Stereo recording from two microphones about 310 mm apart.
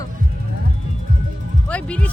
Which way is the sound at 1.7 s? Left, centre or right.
Centre.